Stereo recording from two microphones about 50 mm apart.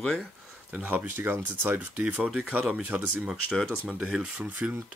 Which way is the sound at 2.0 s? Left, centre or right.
Right.